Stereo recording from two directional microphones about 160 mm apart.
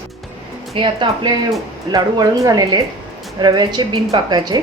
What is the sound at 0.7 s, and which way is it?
A woman's voice, 35° right (ahead or behind).